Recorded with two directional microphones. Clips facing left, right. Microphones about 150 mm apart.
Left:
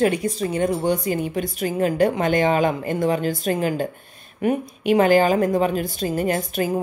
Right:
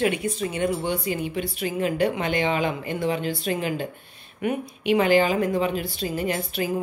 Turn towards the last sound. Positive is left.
turn(degrees=45)  # may be behind; listen again after turning